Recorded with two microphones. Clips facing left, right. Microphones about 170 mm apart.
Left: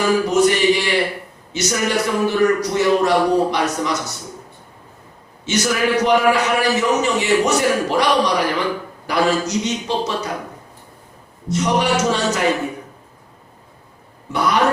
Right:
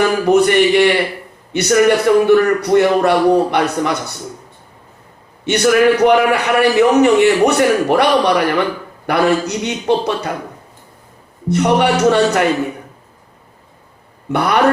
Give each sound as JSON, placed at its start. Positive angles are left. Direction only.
{"t": 0.3, "sound": "a man's voice", "side_deg": -60}
{"t": 5.5, "sound": "a man's voice", "side_deg": -60}
{"t": 11.4, "sound": "a man's voice", "side_deg": -60}
{"t": 14.3, "sound": "a man's voice", "side_deg": -60}